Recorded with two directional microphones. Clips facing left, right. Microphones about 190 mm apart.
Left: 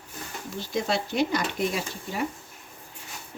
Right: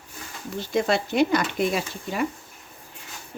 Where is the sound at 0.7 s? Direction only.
60° right (ahead or behind).